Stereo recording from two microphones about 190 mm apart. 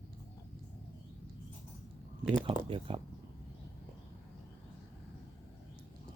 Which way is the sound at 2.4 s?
25° right (ahead or behind).